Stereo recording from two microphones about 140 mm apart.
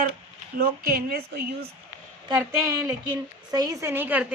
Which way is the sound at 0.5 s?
90° right.